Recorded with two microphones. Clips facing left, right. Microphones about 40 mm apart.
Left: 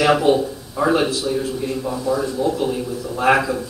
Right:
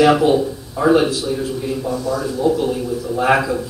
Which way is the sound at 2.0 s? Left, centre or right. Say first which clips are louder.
Left 1 dB; centre.